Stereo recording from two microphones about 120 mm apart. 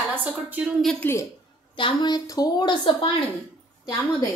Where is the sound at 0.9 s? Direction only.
20° left (ahead or behind).